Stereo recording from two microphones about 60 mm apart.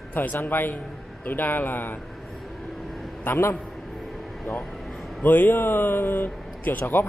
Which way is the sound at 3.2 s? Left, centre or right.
Left.